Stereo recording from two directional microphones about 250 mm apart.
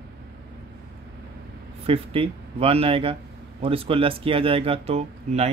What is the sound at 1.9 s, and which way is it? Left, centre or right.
Speech, right.